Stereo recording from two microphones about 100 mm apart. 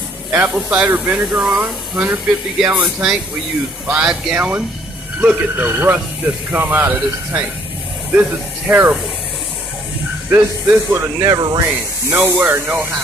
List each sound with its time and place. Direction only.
0.3 s speech: 15° right (ahead or behind)
10.3 s speech: 25° right (ahead or behind)
11.1 s speech: 40° right (ahead or behind)
12.1 s speech: 20° right (ahead or behind)